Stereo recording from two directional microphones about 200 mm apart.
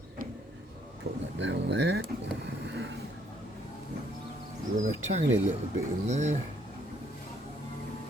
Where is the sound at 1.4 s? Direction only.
65° right (ahead or behind).